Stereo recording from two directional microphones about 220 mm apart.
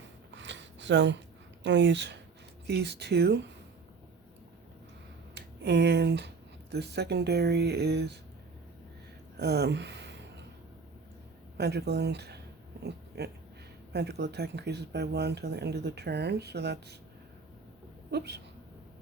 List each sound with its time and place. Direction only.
0.3 s a sound: 55° right (ahead or behind)
1.6 s speech: 55° right (ahead or behind)
5.3 s speech: 50° right (ahead or behind)
9.4 s a sound: 50° right (ahead or behind)
11.5 s speech: 50° right (ahead or behind)
18.1 s speech: 50° right (ahead or behind)